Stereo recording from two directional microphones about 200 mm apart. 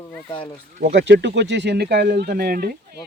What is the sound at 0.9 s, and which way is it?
Speech, 60° right (ahead or behind).